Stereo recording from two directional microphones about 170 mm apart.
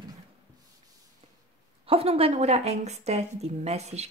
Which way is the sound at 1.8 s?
35° right (ahead or behind).